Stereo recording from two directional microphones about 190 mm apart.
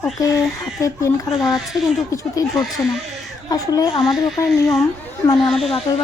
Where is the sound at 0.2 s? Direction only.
15° left (ahead or behind).